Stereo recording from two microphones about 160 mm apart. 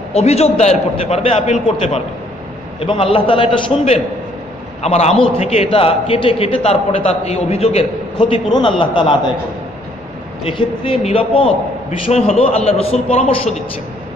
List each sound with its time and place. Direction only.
0.1 s a man's voice: 40° left (ahead or behind)
10.4 s a man's voice: 35° left (ahead or behind)